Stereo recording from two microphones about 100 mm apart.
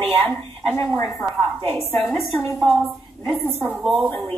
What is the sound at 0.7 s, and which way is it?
Speech, 30° left (ahead or behind).